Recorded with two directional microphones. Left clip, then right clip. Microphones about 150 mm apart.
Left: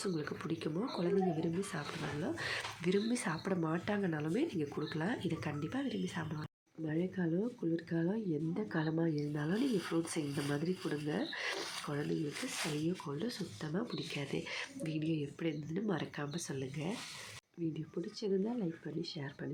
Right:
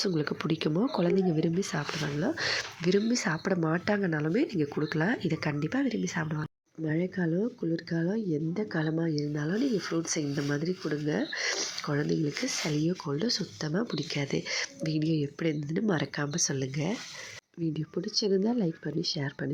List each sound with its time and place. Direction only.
0.0 s speech: 45° right (ahead or behind)
2.8 s speech: 30° right (ahead or behind)
13.1 s speech: 35° right (ahead or behind)